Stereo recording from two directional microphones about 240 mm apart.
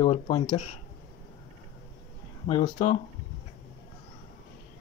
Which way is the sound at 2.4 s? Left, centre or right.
Left.